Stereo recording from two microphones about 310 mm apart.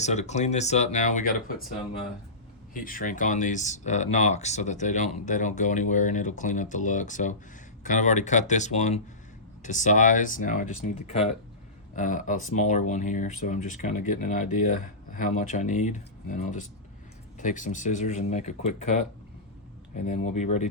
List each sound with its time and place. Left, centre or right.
0.0 s speech: left
2.7 s speech: left
20.4 s speech: left